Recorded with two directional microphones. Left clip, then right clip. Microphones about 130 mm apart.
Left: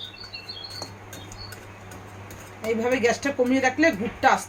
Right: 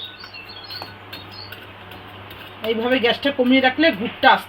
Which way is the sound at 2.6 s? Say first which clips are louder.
Right 4 dB; 40° right (ahead or behind).